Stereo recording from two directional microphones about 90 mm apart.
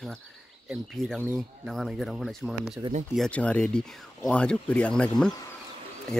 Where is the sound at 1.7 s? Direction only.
Centre (ahead or behind).